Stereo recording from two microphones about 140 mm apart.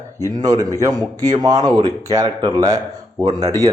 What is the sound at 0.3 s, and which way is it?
Speech, 25° right (ahead or behind).